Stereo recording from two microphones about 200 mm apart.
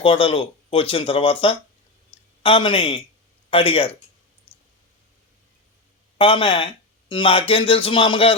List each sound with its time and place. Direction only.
0.0 s speech: 25° left (ahead or behind)
6.1 s speech: 25° left (ahead or behind)